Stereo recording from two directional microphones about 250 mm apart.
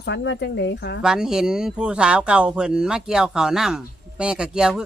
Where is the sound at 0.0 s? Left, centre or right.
Left.